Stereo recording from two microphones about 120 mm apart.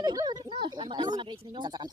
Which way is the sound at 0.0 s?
35° right (ahead or behind).